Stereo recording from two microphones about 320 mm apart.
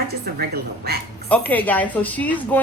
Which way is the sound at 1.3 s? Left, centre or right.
Centre.